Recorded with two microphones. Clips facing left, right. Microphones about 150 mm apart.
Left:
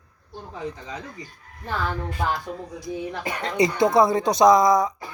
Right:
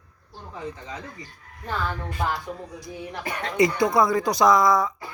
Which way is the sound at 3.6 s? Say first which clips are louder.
Left 2 dB; 25° left (ahead or behind).